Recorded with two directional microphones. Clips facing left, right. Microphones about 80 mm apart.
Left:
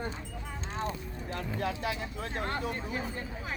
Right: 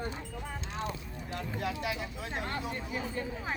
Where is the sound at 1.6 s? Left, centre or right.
Left.